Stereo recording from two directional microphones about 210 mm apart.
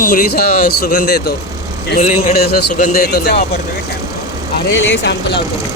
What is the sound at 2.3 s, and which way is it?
Speech, 50° left (ahead or behind).